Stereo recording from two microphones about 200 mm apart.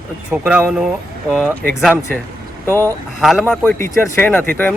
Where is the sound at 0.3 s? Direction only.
5° right (ahead or behind).